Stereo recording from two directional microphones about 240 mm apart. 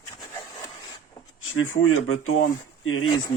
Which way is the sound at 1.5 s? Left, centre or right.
Left.